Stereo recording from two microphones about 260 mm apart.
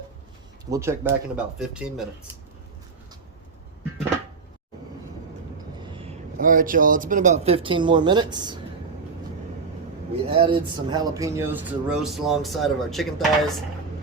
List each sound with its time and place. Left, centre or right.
0.6 s speech: centre
5.8 s a man's voice: centre
10.2 s speech: right; by 13.5 s centre